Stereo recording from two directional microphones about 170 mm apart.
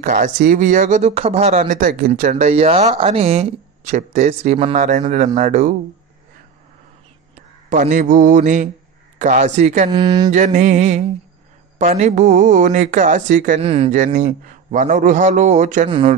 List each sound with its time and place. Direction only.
0.0 s a man's voice: 50° right (ahead or behind)
1.6 s a man's voice: 55° right (ahead or behind)
7.7 s a man's voice: 50° right (ahead or behind)
9.8 s speech: 25° right (ahead or behind)
10.3 s a man's voice: 45° right (ahead or behind)
13.6 s a man's voice: 35° right (ahead or behind)